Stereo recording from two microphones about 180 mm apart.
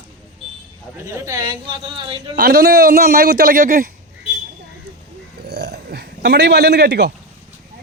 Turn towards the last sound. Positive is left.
turn(degrees=-65)  # may be behind; listen again after turning